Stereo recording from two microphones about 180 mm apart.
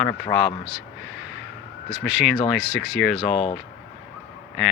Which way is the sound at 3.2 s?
30° left (ahead or behind).